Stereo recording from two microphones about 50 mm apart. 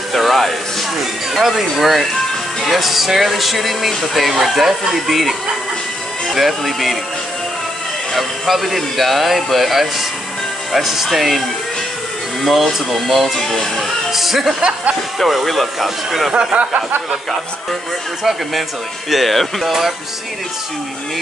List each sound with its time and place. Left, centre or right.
0.1 s a sound: centre
1.4 s speech: centre
8.1 s speech: centre
12.4 s speech: centre
16.5 s speech: right
19.0 s speech: centre